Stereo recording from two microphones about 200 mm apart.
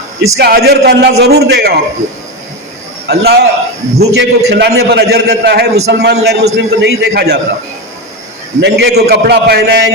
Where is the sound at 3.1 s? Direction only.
55° right (ahead or behind).